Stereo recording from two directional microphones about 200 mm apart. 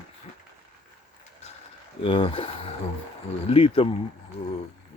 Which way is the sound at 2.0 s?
25° left (ahead or behind).